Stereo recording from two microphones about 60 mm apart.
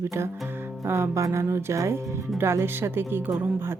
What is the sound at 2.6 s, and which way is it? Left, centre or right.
Speech, right.